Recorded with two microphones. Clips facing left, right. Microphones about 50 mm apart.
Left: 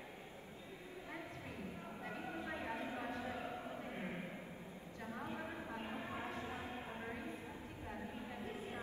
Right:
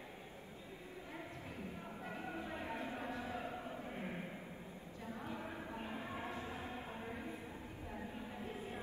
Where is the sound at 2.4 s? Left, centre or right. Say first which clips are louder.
Even; left.